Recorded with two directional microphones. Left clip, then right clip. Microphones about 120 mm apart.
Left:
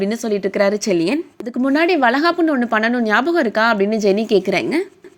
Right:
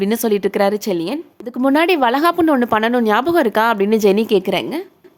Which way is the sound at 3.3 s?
30° right (ahead or behind).